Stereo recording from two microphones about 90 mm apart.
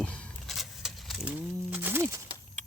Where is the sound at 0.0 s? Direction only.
15° left (ahead or behind).